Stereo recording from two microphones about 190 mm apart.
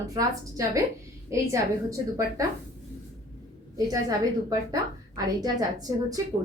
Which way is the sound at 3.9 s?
20° right (ahead or behind).